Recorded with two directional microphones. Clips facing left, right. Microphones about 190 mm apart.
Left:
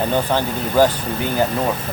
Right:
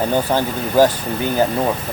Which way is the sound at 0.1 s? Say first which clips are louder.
Right 1 dB; 10° right (ahead or behind).